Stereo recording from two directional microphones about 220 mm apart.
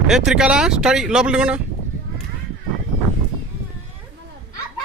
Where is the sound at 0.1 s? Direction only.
5° right (ahead or behind).